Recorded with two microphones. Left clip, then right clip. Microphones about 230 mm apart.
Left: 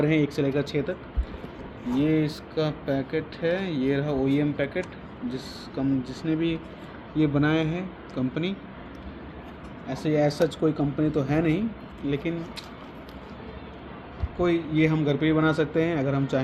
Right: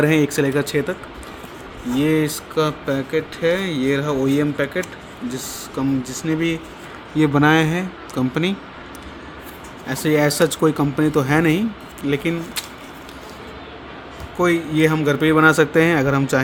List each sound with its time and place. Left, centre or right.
0.0 s speech: right
2.0 s speech: right
9.8 s speech: right
14.3 s speech: right